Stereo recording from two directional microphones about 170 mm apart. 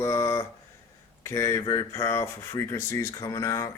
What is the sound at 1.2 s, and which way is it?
Speech, 15° left (ahead or behind).